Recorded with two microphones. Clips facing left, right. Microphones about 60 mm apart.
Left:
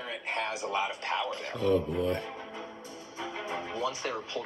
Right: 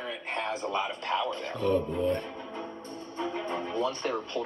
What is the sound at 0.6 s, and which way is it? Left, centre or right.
Speech, centre.